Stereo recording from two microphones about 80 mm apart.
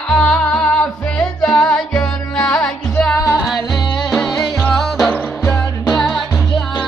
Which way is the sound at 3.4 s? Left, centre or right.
Centre.